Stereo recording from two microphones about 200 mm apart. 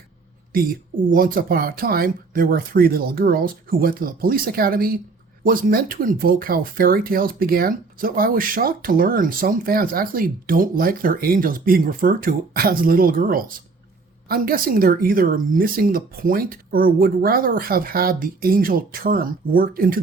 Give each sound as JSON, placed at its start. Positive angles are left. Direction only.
{"t": 0.5, "sound": "speech", "side_deg": -45}